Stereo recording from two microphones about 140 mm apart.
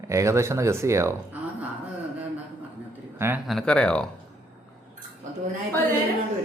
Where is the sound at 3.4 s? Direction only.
5° left (ahead or behind).